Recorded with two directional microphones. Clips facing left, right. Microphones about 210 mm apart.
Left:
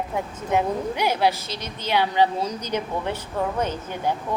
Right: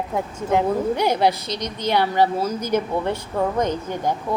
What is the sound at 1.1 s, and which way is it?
Speech, 15° right (ahead or behind).